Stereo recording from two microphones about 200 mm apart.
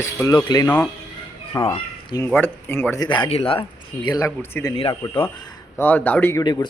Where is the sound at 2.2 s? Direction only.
10° left (ahead or behind).